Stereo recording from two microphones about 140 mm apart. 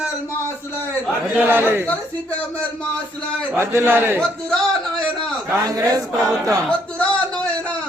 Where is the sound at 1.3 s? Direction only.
15° right (ahead or behind).